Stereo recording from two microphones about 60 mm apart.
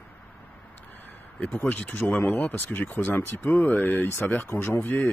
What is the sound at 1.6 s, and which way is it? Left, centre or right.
Speech, left.